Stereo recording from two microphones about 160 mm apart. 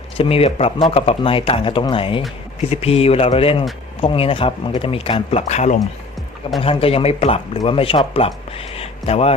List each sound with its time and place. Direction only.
0.2 s speech: 40° left (ahead or behind)